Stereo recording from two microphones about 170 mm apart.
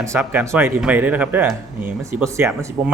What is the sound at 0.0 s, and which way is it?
Speech, 15° right (ahead or behind).